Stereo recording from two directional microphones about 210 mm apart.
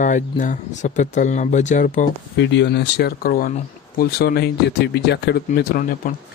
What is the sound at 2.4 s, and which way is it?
Speech, 55° left (ahead or behind).